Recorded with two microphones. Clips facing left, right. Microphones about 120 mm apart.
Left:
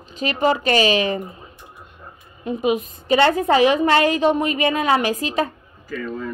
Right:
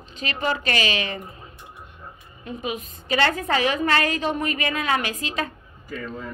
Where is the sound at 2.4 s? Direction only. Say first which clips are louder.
Left 10 dB; 35° left (ahead or behind).